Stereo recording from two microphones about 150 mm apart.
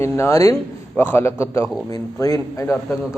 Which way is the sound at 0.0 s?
20° left (ahead or behind).